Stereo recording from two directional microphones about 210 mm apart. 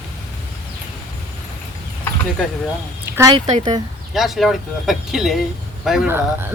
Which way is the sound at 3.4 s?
35° right (ahead or behind).